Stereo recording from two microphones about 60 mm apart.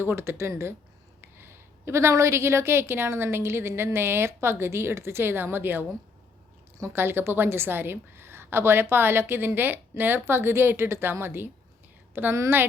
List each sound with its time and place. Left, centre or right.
0.0 s a woman's voice: right
6.9 s a woman's voice: right